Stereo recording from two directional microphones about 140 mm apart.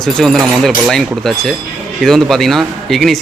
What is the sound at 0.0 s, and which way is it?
Speech, 5° left (ahead or behind).